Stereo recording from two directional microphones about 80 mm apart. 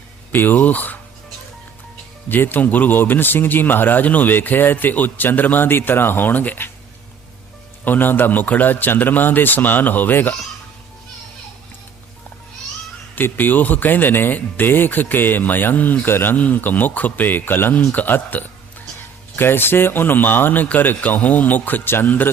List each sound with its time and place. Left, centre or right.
0.3 s speech: left
2.3 s speech: left
7.9 s speech: left
13.1 s speech: left